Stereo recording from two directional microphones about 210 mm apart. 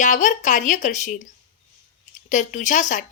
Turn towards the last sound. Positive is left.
turn(degrees=35)  # may be behind; listen again after turning